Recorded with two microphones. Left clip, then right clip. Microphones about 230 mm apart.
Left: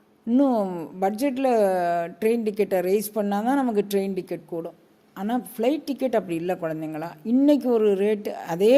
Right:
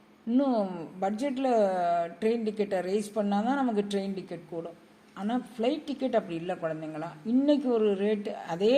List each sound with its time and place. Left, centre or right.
0.3 s a woman's voice: left